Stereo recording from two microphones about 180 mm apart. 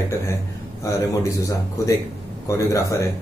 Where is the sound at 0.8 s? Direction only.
20° left (ahead or behind).